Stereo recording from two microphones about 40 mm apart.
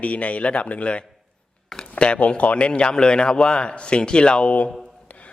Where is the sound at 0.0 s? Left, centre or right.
Left.